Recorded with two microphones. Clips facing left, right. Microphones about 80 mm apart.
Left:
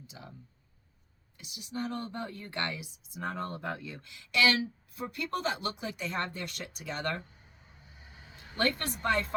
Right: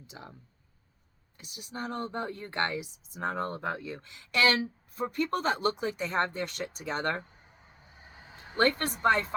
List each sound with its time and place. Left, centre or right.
0.1 s speech: right
1.4 s speech: right
8.0 s vehicle: right